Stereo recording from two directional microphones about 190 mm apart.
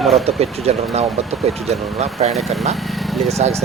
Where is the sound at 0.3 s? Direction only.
35° right (ahead or behind).